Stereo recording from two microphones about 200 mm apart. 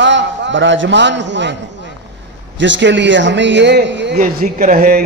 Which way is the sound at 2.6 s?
65° right (ahead or behind).